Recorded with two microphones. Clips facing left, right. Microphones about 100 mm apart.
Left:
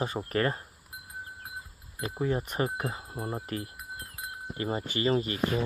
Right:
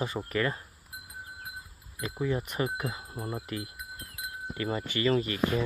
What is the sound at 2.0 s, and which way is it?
Speech, 35° left (ahead or behind).